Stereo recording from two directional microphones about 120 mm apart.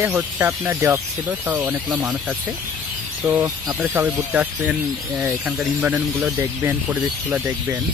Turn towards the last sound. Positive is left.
turn(degrees=-15)  # may be behind; listen again after turning